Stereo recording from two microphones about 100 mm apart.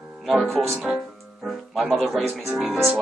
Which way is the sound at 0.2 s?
Centre (ahead or behind).